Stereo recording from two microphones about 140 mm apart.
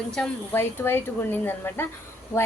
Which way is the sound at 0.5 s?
15° left (ahead or behind).